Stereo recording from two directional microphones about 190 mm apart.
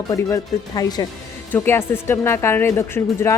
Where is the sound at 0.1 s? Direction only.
20° left (ahead or behind).